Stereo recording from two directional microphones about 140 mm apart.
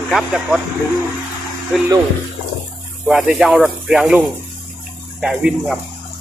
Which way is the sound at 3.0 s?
5° right (ahead or behind).